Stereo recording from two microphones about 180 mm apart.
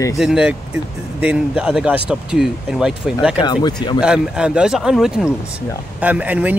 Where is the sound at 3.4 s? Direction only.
25° left (ahead or behind).